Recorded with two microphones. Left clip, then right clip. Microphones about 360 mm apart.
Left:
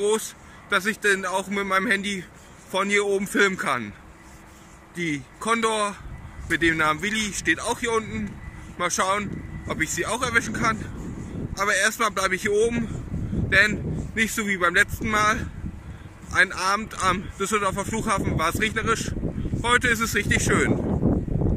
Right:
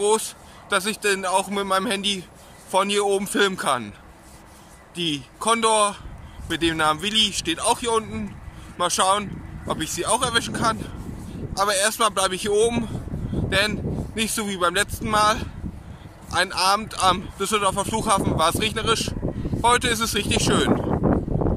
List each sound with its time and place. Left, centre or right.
0.0 s speech: centre
4.9 s speech: centre
21.1 s a sound: right